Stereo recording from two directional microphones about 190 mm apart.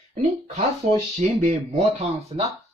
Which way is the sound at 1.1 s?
35° right (ahead or behind).